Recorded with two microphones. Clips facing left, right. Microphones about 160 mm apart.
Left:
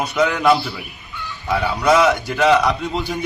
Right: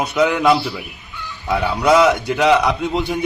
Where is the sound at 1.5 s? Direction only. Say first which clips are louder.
Right 1 dB; 15° right (ahead or behind).